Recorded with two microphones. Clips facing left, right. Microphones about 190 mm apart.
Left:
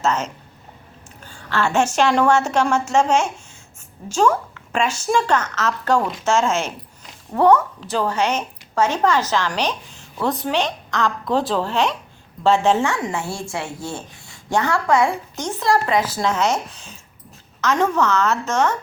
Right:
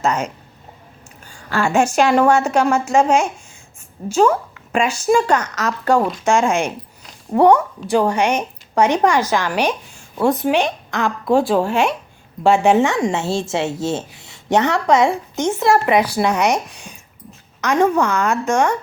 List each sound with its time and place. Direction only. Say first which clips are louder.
0.0 s a woman's voice: right 2 dB; 10° right (ahead or behind)
1.3 s a woman's voice: right 3 dB; 10° right (ahead or behind)